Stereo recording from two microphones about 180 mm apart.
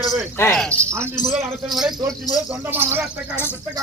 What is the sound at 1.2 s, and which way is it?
Speech, 35° right (ahead or behind).